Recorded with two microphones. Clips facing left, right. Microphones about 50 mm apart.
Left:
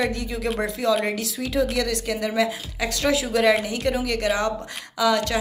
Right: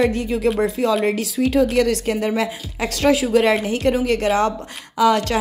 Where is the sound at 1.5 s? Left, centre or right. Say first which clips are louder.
Right 5 dB; right.